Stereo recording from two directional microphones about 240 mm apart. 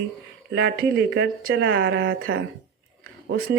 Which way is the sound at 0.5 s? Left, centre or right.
Right.